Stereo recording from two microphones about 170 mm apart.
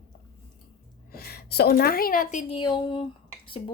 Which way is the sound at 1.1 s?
65° left (ahead or behind).